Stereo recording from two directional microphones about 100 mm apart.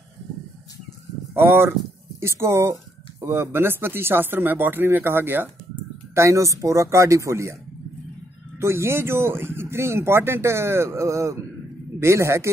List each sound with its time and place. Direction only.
1.3 s speech: 25° right (ahead or behind)
6.1 s speech: 30° right (ahead or behind)
8.5 s speech: 25° right (ahead or behind)